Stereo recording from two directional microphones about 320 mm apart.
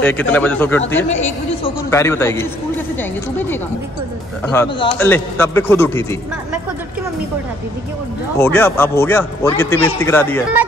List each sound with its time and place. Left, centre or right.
0.0 s a man's voice: centre
8.4 s a man's voice: centre